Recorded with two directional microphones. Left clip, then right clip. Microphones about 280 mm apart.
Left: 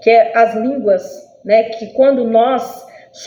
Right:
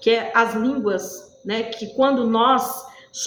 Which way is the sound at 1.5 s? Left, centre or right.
Centre.